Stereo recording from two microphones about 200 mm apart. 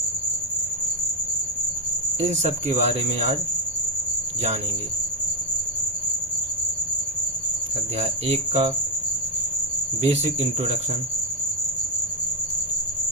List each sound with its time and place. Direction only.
2.2 s speech: 35° right (ahead or behind)
7.9 s speech: 30° right (ahead or behind)
10.0 s speech: 30° right (ahead or behind)